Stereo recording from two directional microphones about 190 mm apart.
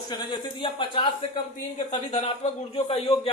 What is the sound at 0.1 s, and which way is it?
A man's voice, 25° left (ahead or behind).